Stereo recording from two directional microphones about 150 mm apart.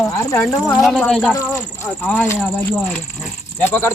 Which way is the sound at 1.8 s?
15° left (ahead or behind).